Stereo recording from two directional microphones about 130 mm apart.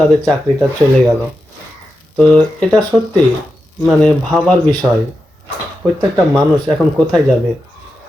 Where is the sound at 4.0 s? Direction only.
5° left (ahead or behind).